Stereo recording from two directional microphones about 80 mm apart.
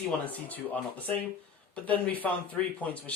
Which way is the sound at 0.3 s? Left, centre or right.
Left.